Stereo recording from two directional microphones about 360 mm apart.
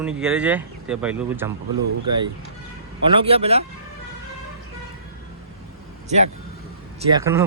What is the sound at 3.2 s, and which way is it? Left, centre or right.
Speech, centre.